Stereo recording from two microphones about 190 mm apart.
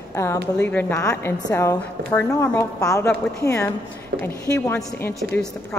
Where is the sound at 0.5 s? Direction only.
10° left (ahead or behind).